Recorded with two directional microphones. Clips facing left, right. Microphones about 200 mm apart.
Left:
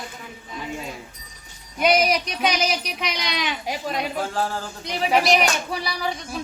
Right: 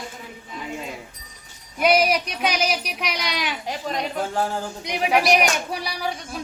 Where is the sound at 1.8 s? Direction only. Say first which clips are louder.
Right 1 dB; 5° right (ahead or behind).